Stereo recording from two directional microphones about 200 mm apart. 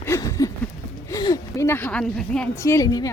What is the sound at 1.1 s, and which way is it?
A woman's voice, 15° left (ahead or behind).